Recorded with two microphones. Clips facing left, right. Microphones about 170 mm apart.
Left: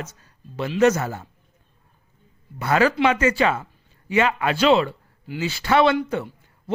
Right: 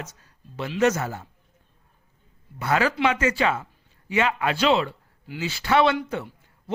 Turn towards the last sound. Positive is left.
turn(degrees=45)  # may be behind; listen again after turning